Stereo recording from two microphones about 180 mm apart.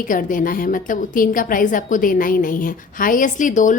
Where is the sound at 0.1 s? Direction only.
45° left (ahead or behind).